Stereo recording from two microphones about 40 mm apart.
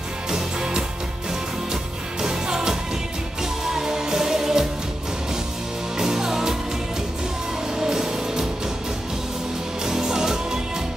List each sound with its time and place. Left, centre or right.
0.3 s music: centre
2.2 s music: centre
5.9 s music: centre
7.8 s music: centre
9.8 s music: centre